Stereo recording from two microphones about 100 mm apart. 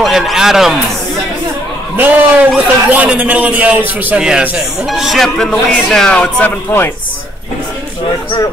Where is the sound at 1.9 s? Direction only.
15° right (ahead or behind); by 6.5 s 10° left (ahead or behind).